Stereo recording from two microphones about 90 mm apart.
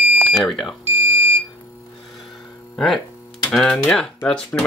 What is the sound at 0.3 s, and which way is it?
Speech, centre (ahead or behind).